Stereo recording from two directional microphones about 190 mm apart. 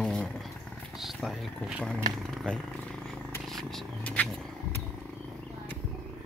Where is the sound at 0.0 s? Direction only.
5° left (ahead or behind).